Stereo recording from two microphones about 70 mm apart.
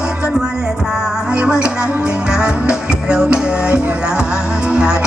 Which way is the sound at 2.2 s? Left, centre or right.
Centre.